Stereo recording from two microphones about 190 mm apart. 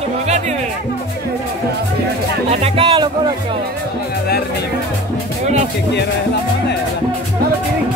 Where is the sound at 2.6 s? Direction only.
30° right (ahead or behind).